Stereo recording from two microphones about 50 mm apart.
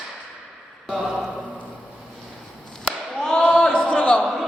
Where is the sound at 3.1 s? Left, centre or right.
Centre.